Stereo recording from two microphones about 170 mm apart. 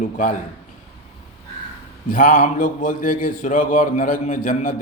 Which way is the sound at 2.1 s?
55° left (ahead or behind).